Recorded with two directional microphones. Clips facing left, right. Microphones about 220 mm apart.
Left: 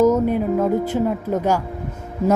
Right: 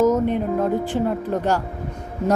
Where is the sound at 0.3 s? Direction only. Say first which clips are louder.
Left 2 dB; 5° left (ahead or behind).